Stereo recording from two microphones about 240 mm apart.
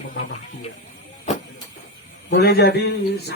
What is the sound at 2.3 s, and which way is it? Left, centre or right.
Speech, left.